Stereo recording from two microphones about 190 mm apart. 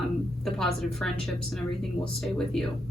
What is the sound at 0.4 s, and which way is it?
A woman's voice, centre (ahead or behind).